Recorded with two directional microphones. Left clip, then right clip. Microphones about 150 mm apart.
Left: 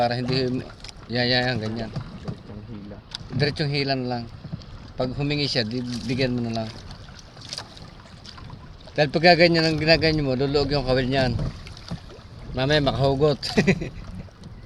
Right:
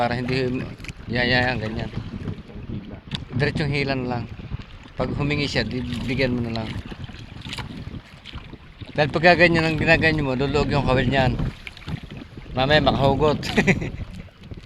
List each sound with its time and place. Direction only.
0.0 s speech: 35° left (ahead or behind)
3.3 s speech: 35° left (ahead or behind)
9.0 s speech: 40° left (ahead or behind)
12.5 s speech: 35° left (ahead or behind)